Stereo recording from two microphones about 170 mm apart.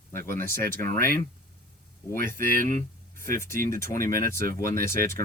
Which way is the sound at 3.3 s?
15° left (ahead or behind).